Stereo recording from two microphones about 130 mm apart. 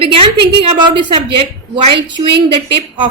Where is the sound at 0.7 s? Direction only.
40° right (ahead or behind).